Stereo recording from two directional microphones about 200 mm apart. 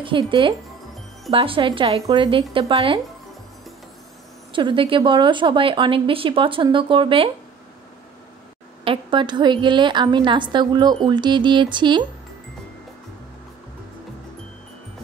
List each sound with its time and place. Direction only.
0.0 s speech: 25° right (ahead or behind)
4.5 s speech: 25° right (ahead or behind)
8.8 s speech: 25° right (ahead or behind)